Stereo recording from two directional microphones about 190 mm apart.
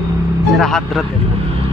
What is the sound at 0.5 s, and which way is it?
Speech, centre (ahead or behind).